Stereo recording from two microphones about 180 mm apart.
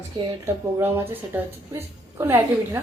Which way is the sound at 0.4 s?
10° right (ahead or behind).